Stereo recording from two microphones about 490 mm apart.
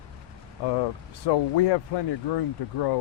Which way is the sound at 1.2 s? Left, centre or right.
Left.